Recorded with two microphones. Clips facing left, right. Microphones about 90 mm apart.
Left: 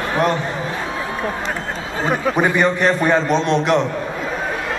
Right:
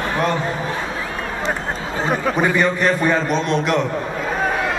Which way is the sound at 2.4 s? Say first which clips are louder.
Left 2 dB; 20° left (ahead or behind).